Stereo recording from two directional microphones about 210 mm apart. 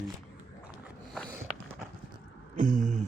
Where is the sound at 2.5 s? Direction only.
35° right (ahead or behind).